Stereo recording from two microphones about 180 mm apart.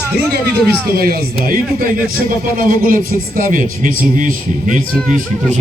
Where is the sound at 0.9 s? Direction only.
55° right (ahead or behind).